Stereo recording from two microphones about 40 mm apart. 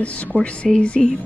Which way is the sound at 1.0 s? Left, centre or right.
Centre.